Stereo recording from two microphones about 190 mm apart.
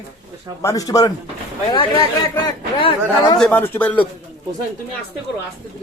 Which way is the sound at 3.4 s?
10° left (ahead or behind).